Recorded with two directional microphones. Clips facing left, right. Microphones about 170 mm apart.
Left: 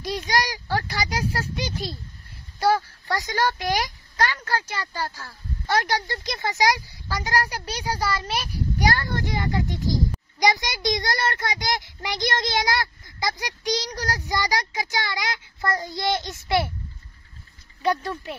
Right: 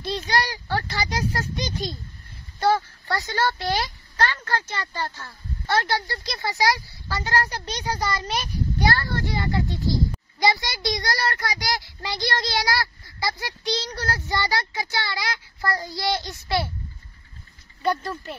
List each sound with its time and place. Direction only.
0.3 s a sound: 10° left (ahead or behind)
2.6 s a woman's voice: 15° left (ahead or behind)
17.8 s speech: centre (ahead or behind)